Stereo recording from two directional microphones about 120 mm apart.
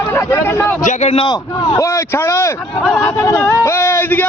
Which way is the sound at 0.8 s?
70° left (ahead or behind).